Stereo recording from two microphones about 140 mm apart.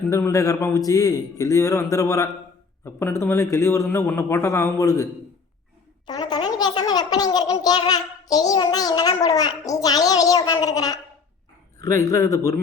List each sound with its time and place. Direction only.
0.1 s a child's voice: 25° left (ahead or behind)
6.1 s a child's voice: 30° left (ahead or behind)